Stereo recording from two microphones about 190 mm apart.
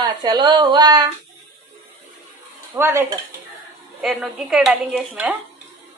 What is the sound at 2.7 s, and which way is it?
Speech, 15° right (ahead or behind).